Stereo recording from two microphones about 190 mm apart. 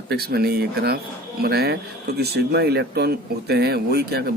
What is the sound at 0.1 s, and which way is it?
Speech, 55° right (ahead or behind).